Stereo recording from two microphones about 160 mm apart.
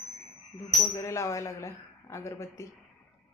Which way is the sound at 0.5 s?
20° left (ahead or behind).